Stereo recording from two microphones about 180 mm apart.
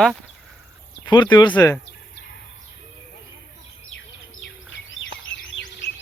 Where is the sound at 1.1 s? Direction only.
25° left (ahead or behind).